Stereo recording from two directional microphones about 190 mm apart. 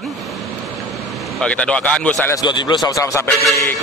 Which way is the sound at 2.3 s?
25° left (ahead or behind).